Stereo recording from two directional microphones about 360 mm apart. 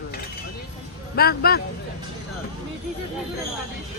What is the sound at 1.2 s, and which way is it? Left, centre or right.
Speech, left.